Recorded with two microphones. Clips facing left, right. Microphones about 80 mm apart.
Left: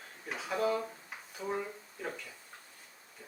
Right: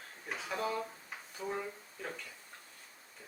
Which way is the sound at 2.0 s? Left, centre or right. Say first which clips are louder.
Left 3 dB; centre.